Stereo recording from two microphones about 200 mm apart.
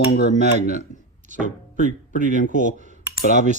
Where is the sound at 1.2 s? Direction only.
40° right (ahead or behind).